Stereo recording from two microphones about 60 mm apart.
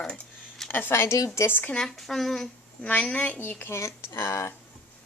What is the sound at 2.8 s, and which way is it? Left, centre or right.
Speech, left.